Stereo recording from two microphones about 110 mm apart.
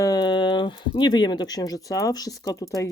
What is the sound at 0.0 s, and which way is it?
Speech, 35° left (ahead or behind).